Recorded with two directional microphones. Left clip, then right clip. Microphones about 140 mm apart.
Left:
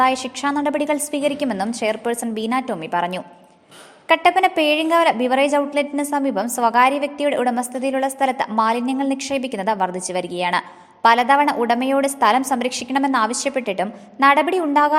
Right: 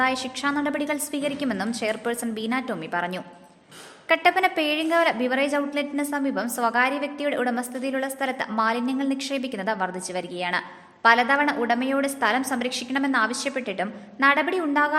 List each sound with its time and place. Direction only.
0.0 s a woman's voice: 25° left (ahead or behind)